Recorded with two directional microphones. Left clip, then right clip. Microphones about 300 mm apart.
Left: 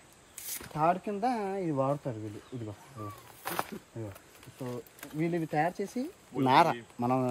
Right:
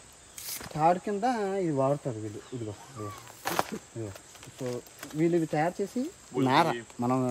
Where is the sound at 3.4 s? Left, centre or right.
Right.